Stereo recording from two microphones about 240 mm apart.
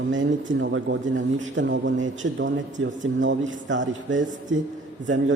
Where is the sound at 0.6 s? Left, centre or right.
Right.